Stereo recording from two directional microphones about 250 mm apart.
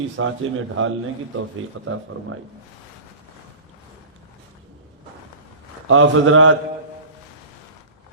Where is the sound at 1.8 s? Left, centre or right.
Right.